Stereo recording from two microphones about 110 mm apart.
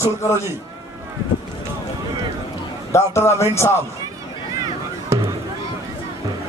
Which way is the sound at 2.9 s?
25° left (ahead or behind).